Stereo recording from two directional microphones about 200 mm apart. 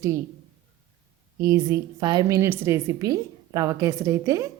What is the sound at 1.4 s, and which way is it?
A woman's voice, 20° right (ahead or behind).